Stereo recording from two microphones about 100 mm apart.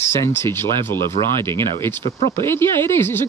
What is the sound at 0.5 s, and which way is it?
Speech, 25° left (ahead or behind).